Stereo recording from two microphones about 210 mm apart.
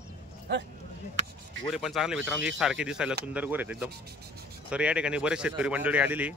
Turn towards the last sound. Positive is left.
turn(degrees=-5)  # may be behind; listen again after turning